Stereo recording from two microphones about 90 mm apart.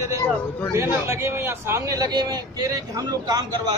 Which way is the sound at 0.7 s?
30° right (ahead or behind).